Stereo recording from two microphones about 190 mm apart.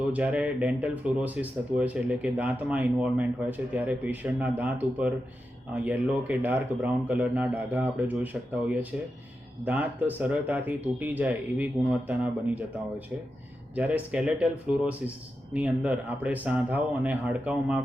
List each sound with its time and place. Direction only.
0.0 s speech: 5° right (ahead or behind)
13.7 s speech: 10° right (ahead or behind)